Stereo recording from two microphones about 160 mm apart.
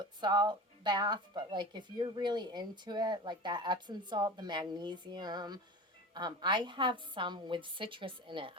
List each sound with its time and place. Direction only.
0.2 s a woman's voice: 25° right (ahead or behind)